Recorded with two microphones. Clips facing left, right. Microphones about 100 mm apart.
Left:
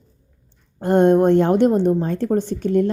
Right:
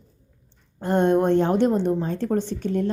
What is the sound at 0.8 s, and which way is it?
A woman's voice, 50° left (ahead or behind).